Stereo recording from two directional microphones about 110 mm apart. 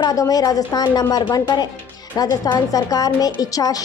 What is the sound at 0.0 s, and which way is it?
A child's voice, 35° left (ahead or behind).